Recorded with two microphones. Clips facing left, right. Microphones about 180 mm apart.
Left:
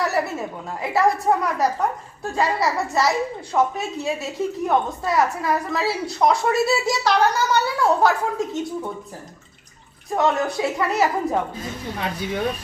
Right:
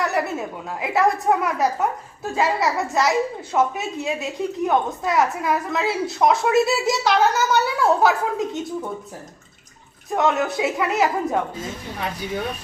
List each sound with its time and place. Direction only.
0.0 s a woman's voice: centre (ahead or behind)
10.1 s a woman's voice: centre (ahead or behind)